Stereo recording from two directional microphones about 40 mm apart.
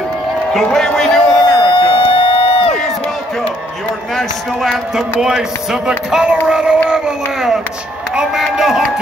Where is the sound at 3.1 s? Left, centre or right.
Centre.